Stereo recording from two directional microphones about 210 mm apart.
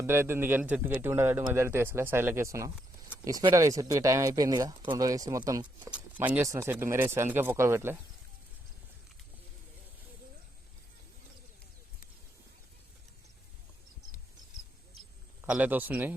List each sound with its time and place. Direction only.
0.0 s speech: 10° right (ahead or behind)
15.4 s speech: 5° right (ahead or behind)